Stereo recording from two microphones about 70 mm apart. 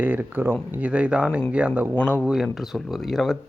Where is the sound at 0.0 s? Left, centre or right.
Right.